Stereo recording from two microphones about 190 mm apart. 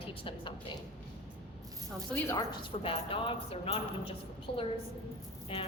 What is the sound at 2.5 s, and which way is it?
A woman's voice, 30° left (ahead or behind).